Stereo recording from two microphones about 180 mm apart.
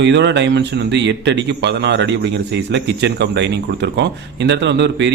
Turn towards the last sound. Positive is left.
turn(degrees=-75)  # may be behind; listen again after turning